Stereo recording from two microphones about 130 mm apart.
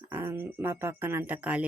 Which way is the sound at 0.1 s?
20° right (ahead or behind).